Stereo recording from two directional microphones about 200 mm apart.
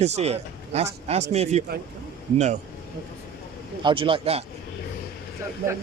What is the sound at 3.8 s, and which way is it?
Speech, 25° right (ahead or behind).